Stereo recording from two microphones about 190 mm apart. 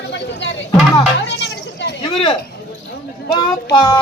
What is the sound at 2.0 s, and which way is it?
A man's voice, 30° left (ahead or behind).